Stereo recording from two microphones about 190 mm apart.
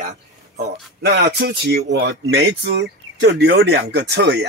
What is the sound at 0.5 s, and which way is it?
Speech, 55° right (ahead or behind).